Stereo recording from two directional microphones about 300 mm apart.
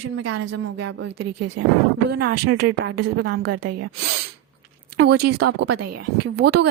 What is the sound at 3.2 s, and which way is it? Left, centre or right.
Speech, right.